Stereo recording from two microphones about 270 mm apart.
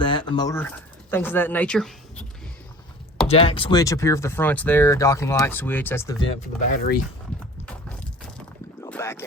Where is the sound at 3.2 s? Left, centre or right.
Left.